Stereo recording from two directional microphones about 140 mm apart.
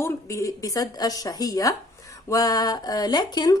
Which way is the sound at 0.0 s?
20° left (ahead or behind).